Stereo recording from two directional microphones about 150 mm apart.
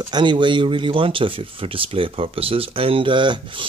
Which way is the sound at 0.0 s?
30° right (ahead or behind).